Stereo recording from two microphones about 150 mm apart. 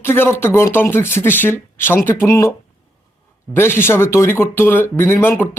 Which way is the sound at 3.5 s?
15° left (ahead or behind).